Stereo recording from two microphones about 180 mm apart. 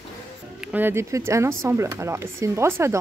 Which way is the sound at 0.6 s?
10° right (ahead or behind).